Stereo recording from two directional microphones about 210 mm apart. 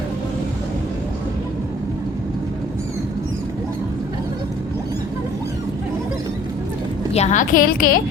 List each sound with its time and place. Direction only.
7.1 s a woman's voice: 30° left (ahead or behind)